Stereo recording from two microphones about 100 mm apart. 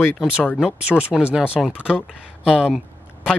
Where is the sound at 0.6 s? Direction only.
10° right (ahead or behind).